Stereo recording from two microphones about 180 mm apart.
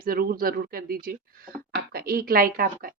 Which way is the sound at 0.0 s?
55° right (ahead or behind).